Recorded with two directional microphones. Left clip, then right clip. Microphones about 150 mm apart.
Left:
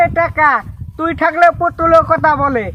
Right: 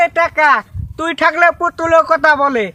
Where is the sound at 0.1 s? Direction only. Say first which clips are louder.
Right 1 dB; 20° right (ahead or behind).